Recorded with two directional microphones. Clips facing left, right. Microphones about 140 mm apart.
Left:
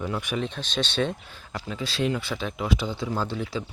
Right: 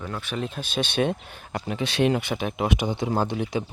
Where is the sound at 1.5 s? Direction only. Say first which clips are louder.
Right 4 dB; 60° right (ahead or behind).